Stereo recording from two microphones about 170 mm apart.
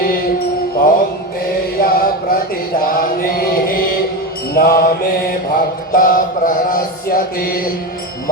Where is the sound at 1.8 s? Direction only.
60° left (ahead or behind).